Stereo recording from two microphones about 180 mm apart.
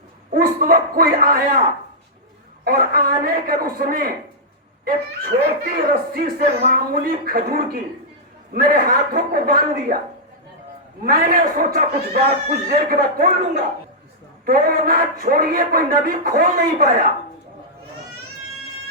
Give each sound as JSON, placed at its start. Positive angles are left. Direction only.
{"t": 0.3, "sound": "a man's voice", "side_deg": -55}
{"t": 2.6, "sound": "a man's voice", "side_deg": -55}
{"t": 5.9, "sound": "a man's voice", "side_deg": -55}
{"t": 11.0, "sound": "a man's voice", "side_deg": -55}